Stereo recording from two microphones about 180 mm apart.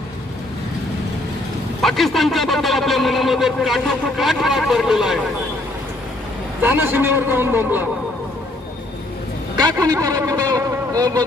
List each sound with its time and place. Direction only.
1.8 s a man's voice: centre (ahead or behind)
6.6 s a man's voice: 10° right (ahead or behind)
9.6 s a sound: 20° right (ahead or behind)